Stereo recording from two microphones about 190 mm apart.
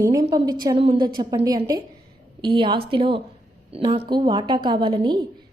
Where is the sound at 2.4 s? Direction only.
25° right (ahead or behind).